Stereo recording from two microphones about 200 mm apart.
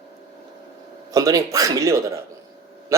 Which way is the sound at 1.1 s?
20° right (ahead or behind).